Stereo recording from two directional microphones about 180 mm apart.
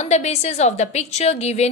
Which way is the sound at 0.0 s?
40° left (ahead or behind).